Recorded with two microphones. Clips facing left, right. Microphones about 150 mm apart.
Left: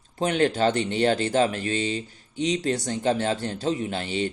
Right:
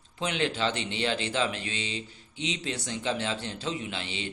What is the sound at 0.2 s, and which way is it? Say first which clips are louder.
A man's voice: left 7 dB; 45° left (ahead or behind).